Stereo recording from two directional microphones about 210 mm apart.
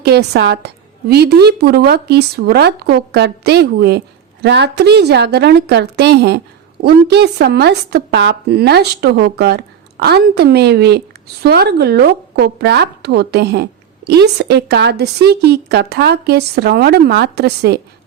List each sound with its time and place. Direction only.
0.0 s a woman's voice: 50° right (ahead or behind)